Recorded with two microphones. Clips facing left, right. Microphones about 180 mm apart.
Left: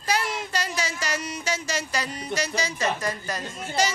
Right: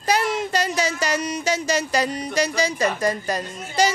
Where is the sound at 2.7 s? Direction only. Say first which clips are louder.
Right 5 dB; 35° right (ahead or behind).